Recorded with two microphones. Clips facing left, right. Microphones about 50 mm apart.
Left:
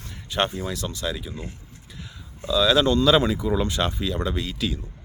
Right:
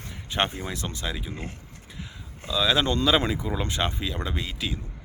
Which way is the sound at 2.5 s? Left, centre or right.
Centre.